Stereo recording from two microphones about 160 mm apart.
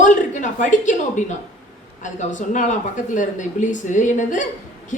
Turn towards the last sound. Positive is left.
turn(degrees=50)  # may be behind; listen again after turning